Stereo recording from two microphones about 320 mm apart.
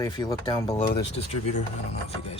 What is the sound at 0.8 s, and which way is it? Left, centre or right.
Speech, left.